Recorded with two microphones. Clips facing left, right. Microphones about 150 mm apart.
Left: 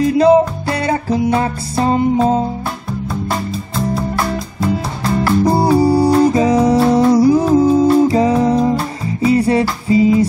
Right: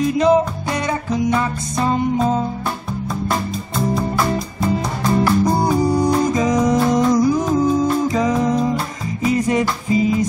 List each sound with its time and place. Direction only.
0.0 s music: 30° left (ahead or behind)
5.4 s music: 30° left (ahead or behind)